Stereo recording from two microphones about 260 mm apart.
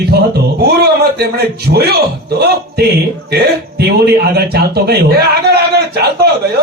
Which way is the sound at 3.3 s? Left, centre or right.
Right.